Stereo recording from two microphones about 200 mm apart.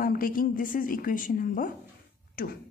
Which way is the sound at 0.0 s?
45° left (ahead or behind).